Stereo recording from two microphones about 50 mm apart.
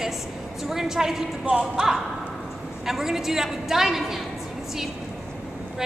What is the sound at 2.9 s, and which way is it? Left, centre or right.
A woman's voice, centre.